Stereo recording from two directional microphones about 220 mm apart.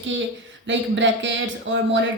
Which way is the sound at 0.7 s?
55° right (ahead or behind).